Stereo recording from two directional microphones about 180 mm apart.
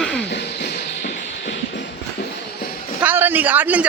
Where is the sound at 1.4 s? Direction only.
75° left (ahead or behind).